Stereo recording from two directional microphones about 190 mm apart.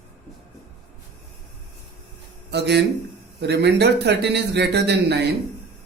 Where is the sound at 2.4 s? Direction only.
65° right (ahead or behind).